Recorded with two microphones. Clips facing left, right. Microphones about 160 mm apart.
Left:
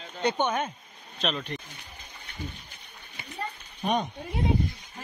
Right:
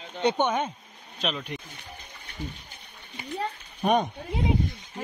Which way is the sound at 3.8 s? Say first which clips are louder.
Right 4 dB; 55° right (ahead or behind).